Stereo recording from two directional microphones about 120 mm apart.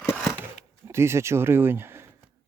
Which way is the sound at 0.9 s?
20° right (ahead or behind).